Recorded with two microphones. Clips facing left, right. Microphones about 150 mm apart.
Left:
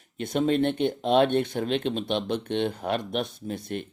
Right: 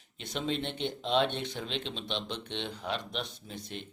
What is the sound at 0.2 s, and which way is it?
Speech, 50° left (ahead or behind).